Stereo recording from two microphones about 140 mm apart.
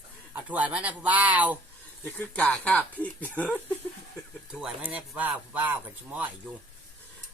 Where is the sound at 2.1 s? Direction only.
10° left (ahead or behind).